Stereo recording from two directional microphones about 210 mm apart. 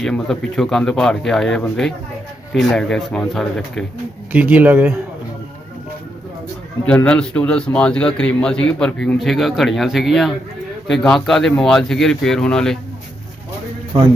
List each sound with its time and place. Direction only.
0.0 s a man's voice: 5° left (ahead or behind)
6.8 s a man's voice: 5° left (ahead or behind)
13.9 s a man's voice: 25° right (ahead or behind)